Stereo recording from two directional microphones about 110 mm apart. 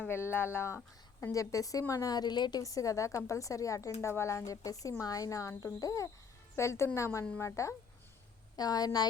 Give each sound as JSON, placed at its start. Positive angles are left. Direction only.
{"t": 0.0, "sound": "a woman's voice", "side_deg": 20}